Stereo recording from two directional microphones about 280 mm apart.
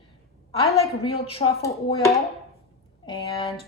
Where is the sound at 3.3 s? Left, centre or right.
Centre.